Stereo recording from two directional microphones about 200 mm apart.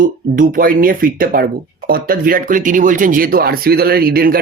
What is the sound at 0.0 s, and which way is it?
Speech, 45° right (ahead or behind).